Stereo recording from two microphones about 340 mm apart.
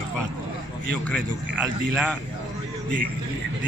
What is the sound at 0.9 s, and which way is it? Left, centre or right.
A man's voice, centre.